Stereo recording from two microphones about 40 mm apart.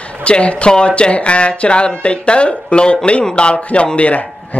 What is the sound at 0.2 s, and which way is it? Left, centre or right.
A man's voice, left.